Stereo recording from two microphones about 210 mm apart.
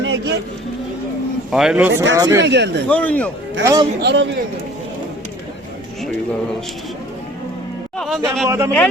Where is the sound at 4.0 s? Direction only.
55° right (ahead or behind).